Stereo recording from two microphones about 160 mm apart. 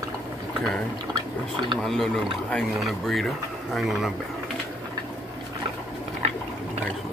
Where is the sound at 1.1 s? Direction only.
30° right (ahead or behind).